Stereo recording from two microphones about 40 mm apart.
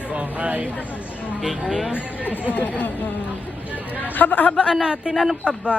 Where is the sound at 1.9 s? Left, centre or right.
Left.